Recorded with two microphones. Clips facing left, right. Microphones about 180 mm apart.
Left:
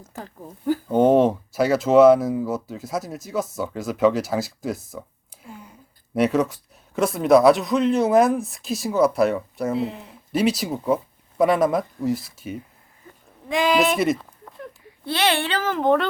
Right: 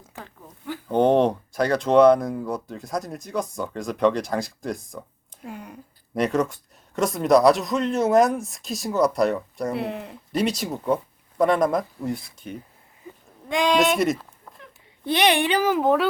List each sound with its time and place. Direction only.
0.0 s zipper: 40° left (ahead or behind)
0.9 s speech: 5° left (ahead or behind)
5.4 s a sound: 70° right (ahead or behind)
6.1 s speech: 5° left (ahead or behind)
9.7 s speech: 65° right (ahead or behind)
10.3 s speech: centre (ahead or behind)
15.0 s a child's voice: 15° right (ahead or behind)